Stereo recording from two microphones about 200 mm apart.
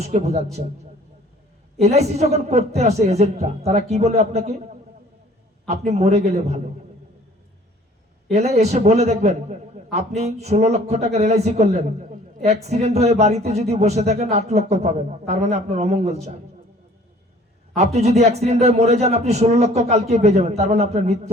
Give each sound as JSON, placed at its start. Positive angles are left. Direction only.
{"t": 0.0, "sound": "speech", "side_deg": -35}
{"t": 1.8, "sound": "speech", "side_deg": -35}
{"t": 5.6, "sound": "speech", "side_deg": -35}
{"t": 8.3, "sound": "speech", "side_deg": -35}
{"t": 17.7, "sound": "speech", "side_deg": -35}